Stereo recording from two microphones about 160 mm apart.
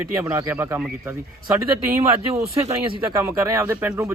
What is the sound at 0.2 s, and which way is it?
Speech, 15° right (ahead or behind).